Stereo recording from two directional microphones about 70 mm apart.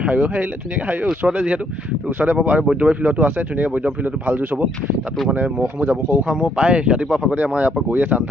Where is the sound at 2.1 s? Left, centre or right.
Right.